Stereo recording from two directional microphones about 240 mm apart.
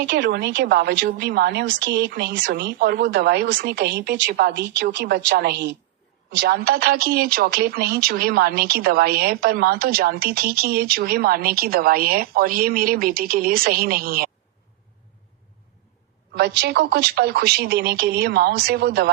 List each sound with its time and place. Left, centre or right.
0.0 s a woman's voice: right
16.3 s a woman's voice: right